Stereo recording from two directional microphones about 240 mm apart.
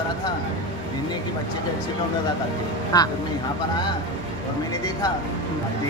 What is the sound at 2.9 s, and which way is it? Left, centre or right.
Speech, centre.